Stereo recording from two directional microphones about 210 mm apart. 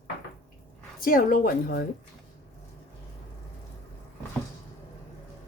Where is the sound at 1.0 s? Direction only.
40° left (ahead or behind).